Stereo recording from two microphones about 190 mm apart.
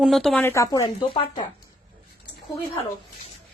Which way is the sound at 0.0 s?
Centre (ahead or behind).